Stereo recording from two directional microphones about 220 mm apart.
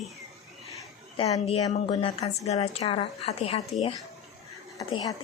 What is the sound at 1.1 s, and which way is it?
A woman's voice, 25° left (ahead or behind).